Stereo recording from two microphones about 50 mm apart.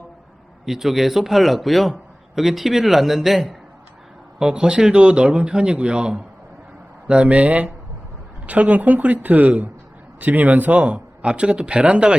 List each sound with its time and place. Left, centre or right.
0.6 s a man's voice: centre